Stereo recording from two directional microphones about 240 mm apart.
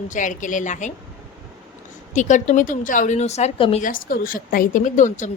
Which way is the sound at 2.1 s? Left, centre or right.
Left.